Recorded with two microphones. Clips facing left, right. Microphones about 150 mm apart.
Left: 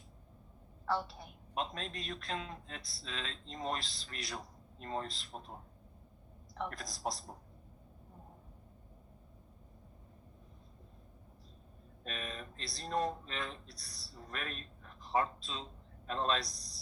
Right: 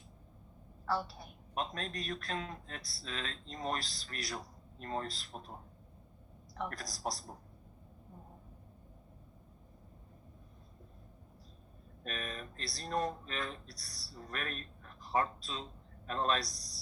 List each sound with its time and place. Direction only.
0.9 s a woman's voice: 25° left (ahead or behind)
6.7 s a man's voice: 25° left (ahead or behind)
12.1 s a man's voice: 25° left (ahead or behind)